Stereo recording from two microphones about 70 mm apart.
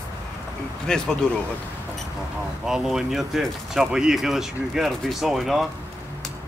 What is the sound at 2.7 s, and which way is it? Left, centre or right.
Speech, centre.